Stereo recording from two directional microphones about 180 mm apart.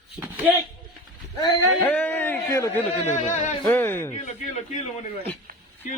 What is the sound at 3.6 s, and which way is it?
Speech, 10° left (ahead or behind).